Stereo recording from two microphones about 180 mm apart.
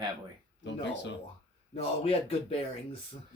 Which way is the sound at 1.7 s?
35° left (ahead or behind).